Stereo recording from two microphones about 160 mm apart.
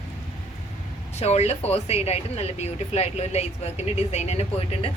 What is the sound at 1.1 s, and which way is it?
Speech, 40° left (ahead or behind).